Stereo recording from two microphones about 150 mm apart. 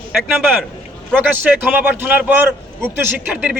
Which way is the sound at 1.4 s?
10° right (ahead or behind).